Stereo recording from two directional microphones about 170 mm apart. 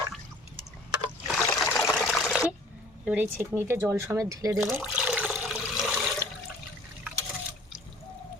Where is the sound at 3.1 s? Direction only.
10° right (ahead or behind).